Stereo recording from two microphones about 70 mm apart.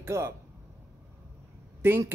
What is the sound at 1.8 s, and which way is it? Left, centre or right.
Speech, right.